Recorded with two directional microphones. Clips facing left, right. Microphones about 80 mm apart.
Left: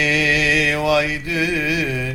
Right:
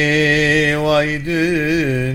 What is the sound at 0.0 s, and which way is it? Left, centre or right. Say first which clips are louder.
Mantra: right 4 dB; right.